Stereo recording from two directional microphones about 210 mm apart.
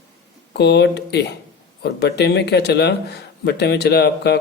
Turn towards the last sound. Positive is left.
turn(degrees=50)  # may be behind; listen again after turning